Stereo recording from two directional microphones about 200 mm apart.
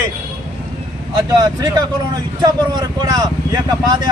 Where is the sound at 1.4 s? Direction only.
20° right (ahead or behind).